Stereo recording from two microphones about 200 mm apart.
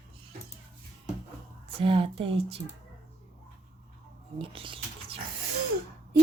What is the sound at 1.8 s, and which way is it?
Speech, 25° right (ahead or behind).